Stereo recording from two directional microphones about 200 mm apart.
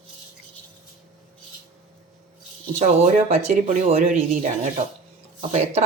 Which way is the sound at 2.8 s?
35° right (ahead or behind).